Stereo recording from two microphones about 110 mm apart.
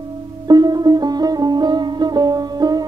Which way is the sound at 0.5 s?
40° right (ahead or behind).